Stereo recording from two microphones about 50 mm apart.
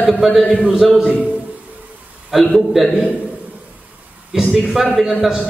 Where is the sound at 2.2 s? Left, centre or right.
Centre.